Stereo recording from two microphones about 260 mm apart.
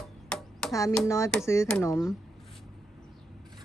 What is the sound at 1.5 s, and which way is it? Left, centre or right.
Speech, centre.